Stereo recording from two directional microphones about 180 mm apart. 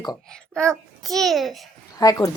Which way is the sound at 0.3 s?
5° left (ahead or behind).